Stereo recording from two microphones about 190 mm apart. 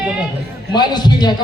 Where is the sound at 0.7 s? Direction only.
25° left (ahead or behind).